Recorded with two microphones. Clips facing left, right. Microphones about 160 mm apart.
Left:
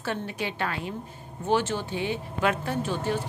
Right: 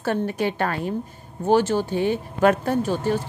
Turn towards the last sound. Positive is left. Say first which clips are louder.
# right 6 dB
turn(degrees=-45)  # may be behind; listen again after turning